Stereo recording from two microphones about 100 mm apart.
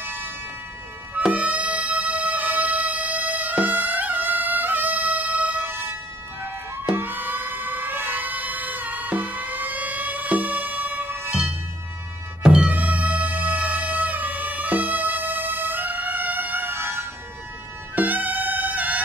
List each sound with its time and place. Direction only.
0.0 s music: 20° right (ahead or behind)
6.4 s siren: 20° right (ahead or behind)
11.2 s music: 5° right (ahead or behind)